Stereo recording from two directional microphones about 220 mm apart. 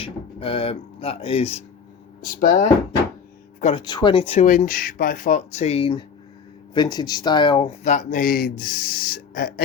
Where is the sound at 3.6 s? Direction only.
25° left (ahead or behind).